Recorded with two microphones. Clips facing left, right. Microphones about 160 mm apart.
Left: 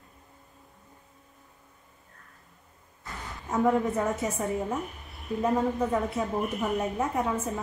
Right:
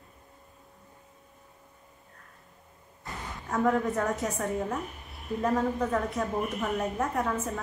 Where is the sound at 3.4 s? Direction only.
5° left (ahead or behind).